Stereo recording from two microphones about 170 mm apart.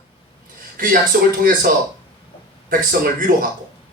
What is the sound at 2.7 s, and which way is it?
Speech, 55° right (ahead or behind).